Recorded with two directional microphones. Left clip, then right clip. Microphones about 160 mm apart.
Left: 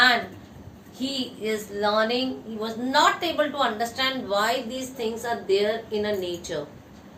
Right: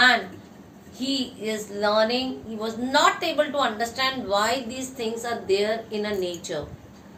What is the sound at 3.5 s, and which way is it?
A woman's voice, 25° right (ahead or behind).